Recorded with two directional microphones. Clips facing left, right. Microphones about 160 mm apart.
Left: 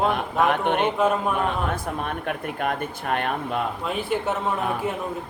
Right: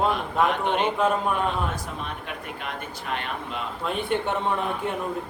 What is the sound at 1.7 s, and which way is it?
Speech, 55° left (ahead or behind).